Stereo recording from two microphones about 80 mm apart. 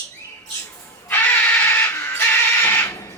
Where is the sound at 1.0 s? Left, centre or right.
Left.